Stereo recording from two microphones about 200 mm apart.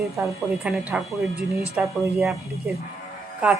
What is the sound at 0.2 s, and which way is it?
Speech, 5° right (ahead or behind).